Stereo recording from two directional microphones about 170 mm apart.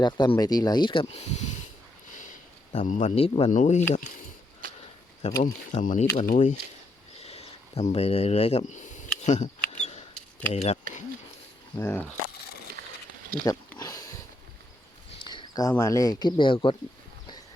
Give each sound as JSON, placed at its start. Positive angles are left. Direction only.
{"t": 0.0, "sound": "speech", "side_deg": 25}
{"t": 2.0, "sound": "sniff", "side_deg": 50}
{"t": 2.7, "sound": "speech", "side_deg": 45}
{"t": 5.4, "sound": "speech", "side_deg": 50}
{"t": 7.2, "sound": "a sound", "side_deg": 40}
{"t": 9.2, "sound": "speech", "side_deg": 45}
{"t": 9.6, "sound": "a sound", "side_deg": 40}
{"t": 10.5, "sound": "speech", "side_deg": 40}
{"t": 11.8, "sound": "speech", "side_deg": 10}
{"t": 13.4, "sound": "a sound", "side_deg": 20}
{"t": 15.2, "sound": "a sound", "side_deg": 25}
{"t": 15.8, "sound": "speech", "side_deg": 20}